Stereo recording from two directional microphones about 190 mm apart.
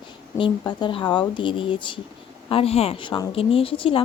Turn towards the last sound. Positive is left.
turn(degrees=30)  # may be behind; listen again after turning